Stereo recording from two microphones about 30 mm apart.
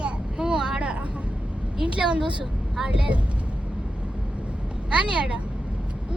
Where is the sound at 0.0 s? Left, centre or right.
Right.